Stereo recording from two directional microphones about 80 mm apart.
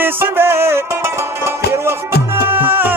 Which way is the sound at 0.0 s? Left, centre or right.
Right.